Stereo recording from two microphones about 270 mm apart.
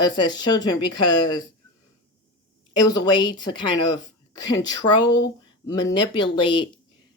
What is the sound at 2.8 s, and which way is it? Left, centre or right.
Speech, centre.